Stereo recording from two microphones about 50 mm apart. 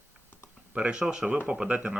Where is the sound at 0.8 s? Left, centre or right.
Right.